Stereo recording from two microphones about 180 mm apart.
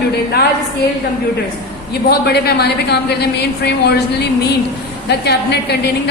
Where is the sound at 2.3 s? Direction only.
65° left (ahead or behind).